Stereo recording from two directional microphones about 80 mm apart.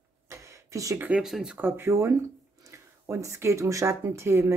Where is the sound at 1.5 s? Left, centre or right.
Right.